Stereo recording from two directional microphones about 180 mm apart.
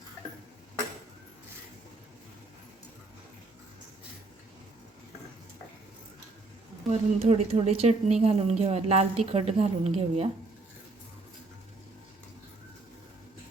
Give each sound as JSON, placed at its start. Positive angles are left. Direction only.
{"t": 6.9, "sound": "a woman's voice", "side_deg": -35}